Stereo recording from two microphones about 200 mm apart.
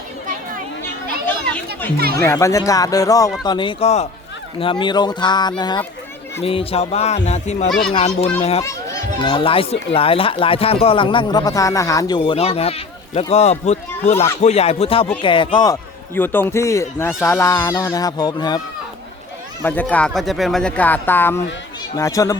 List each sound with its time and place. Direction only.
2.1 s a man's voice: 15° left (ahead or behind); by 8.6 s 30° left (ahead or behind)
8.6 s a man's voice: 20° left (ahead or behind)
19.6 s a man's voice: 10° left (ahead or behind)